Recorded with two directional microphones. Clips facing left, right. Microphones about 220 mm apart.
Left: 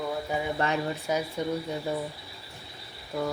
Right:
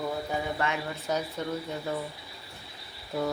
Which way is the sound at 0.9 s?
10° left (ahead or behind).